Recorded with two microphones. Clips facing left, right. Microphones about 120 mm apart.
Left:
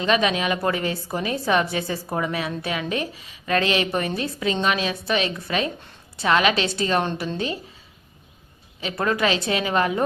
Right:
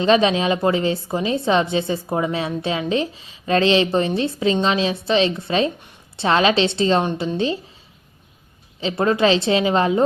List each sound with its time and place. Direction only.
0.0 s a woman's voice: 30° right (ahead or behind)
7.0 s a woman's voice: 15° right (ahead or behind)
7.3 s a woman's voice: 25° right (ahead or behind)
8.8 s a woman's voice: 25° right (ahead or behind)